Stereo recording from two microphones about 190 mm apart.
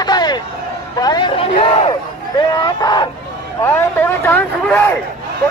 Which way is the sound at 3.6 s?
10° left (ahead or behind).